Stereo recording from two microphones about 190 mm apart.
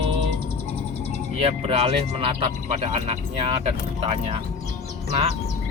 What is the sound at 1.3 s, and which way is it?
Speech, 30° right (ahead or behind).